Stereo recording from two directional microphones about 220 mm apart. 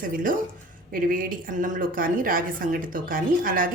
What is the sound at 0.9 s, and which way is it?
Speech, 40° right (ahead or behind).